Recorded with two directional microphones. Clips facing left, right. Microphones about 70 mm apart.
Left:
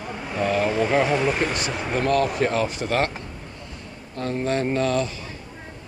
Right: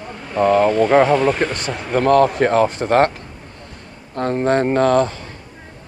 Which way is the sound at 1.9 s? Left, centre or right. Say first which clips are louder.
Right 8 dB; right.